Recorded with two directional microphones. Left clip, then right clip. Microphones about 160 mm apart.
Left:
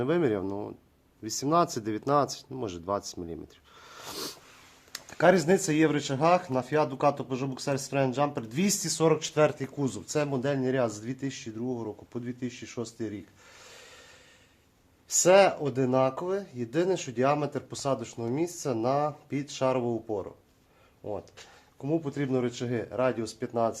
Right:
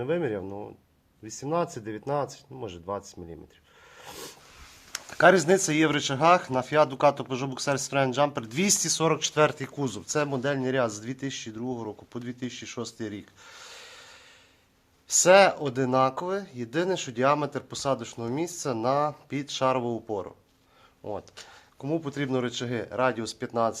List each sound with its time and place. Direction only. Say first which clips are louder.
0.0 s speech: left 2 dB; 35° left (ahead or behind)
1.8 s speech: left 3 dB; 25° left (ahead or behind)
2.0 s speech: left 4 dB; 45° left (ahead or behind)
3.9 s dog: left 4 dB; 45° left (ahead or behind)
4.9 s speech: right 3 dB; centre (ahead or behind)